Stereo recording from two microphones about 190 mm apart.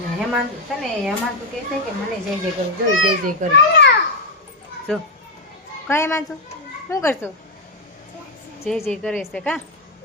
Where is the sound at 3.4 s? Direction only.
40° right (ahead or behind).